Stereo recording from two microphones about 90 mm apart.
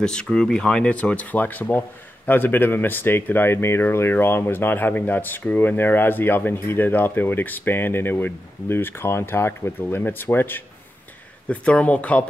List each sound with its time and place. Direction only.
0.0 s speech: 10° left (ahead or behind)
11.4 s speech: 15° left (ahead or behind)